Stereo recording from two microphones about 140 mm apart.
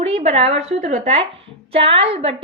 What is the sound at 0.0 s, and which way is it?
Speech, 50° right (ahead or behind).